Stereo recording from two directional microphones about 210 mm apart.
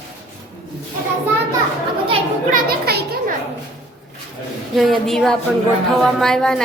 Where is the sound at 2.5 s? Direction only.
45° right (ahead or behind).